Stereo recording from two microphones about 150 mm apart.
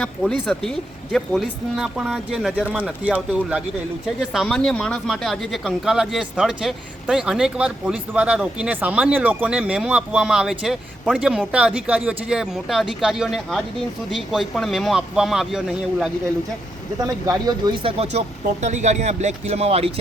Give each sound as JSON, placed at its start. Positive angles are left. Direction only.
{"t": 0.0, "sound": "speech", "side_deg": 5}
{"t": 17.0, "sound": "speech", "side_deg": -25}
{"t": 18.4, "sound": "speech", "side_deg": -55}